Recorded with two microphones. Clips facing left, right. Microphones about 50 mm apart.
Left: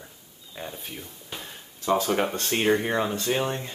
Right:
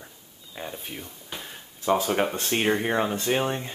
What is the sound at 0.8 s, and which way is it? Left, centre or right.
Speech, centre.